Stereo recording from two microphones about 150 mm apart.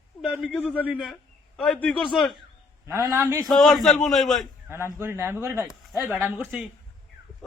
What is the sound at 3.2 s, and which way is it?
Speech, 20° right (ahead or behind).